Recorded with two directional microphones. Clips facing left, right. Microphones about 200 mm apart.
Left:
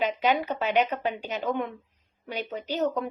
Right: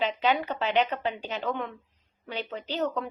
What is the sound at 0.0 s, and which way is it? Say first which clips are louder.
Speech: left 1 dB; 15° left (ahead or behind).